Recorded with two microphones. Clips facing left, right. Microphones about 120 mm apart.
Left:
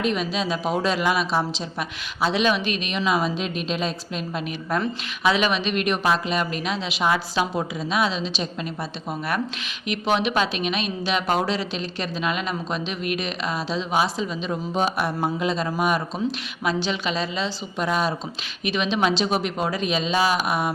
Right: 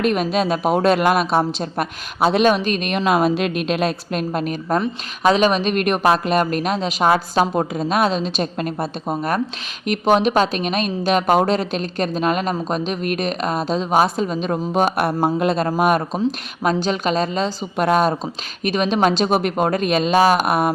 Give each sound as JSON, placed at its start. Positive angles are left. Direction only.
{"t": 0.0, "sound": "a woman's voice", "side_deg": -55}